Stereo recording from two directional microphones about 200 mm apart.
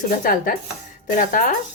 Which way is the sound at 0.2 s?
45° left (ahead or behind).